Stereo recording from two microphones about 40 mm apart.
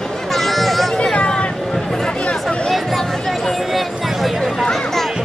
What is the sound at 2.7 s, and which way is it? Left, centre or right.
Chatter, centre.